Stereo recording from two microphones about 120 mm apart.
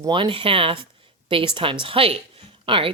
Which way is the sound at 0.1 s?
45° right (ahead or behind).